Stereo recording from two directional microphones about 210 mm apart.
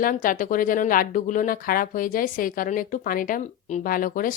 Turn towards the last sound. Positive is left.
turn(degrees=40)  # may be behind; listen again after turning